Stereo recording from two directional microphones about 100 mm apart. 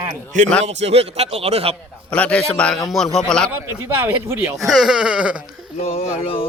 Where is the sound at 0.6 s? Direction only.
90° right.